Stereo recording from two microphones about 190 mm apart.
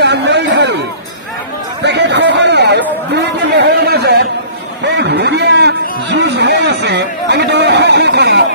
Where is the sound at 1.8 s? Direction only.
65° right (ahead or behind).